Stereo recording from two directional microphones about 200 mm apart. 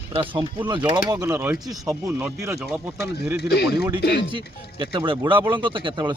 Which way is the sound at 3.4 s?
55° left (ahead or behind).